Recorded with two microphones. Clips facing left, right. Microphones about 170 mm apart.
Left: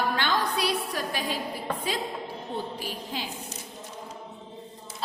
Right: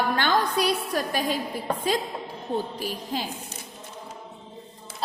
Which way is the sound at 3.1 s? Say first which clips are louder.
Right 5 dB; 40° right (ahead or behind).